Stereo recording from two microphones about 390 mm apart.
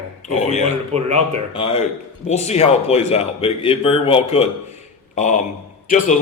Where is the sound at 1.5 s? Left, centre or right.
Centre.